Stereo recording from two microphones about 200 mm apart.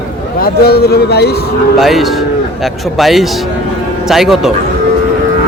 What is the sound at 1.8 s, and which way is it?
A man's voice, centre (ahead or behind).